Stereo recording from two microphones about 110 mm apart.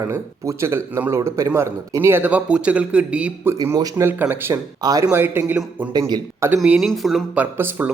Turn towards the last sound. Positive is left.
turn(degrees=-15)  # may be behind; listen again after turning